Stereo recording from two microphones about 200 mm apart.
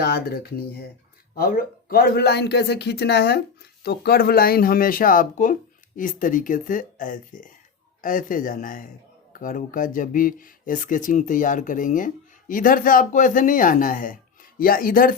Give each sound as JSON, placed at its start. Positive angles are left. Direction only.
{"t": 0.0, "sound": "speech", "side_deg": 50}